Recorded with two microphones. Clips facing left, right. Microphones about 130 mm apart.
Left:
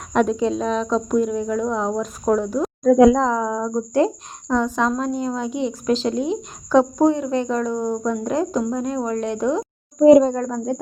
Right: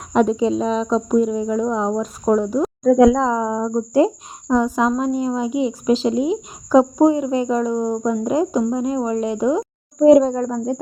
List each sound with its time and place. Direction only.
0.1 s speech: centre (ahead or behind)